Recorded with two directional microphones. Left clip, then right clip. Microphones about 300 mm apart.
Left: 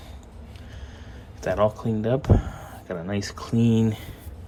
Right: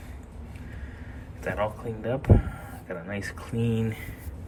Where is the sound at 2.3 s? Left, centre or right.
Right.